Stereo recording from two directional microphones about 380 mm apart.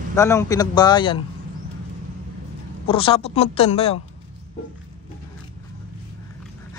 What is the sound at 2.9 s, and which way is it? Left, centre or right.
Speech, centre.